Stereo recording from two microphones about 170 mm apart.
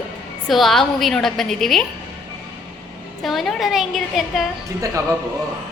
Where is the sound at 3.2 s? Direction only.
Centre (ahead or behind).